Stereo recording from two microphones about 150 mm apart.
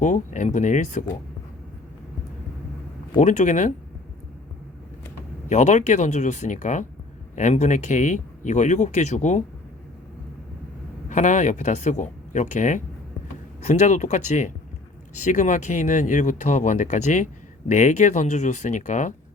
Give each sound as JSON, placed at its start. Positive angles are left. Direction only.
{"t": 0.0, "sound": "speech", "side_deg": 55}
{"t": 3.2, "sound": "speech", "side_deg": 55}
{"t": 5.5, "sound": "speech", "side_deg": 55}
{"t": 11.1, "sound": "speech", "side_deg": 55}